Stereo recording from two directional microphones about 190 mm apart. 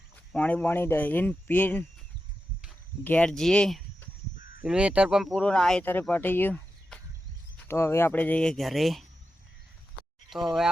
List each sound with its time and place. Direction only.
0.3 s speech: 10° left (ahead or behind)
3.0 s speech: 10° left (ahead or behind)
4.4 s honk: 45° left (ahead or behind)
4.6 s speech: 5° right (ahead or behind)
10.2 s speech: centre (ahead or behind)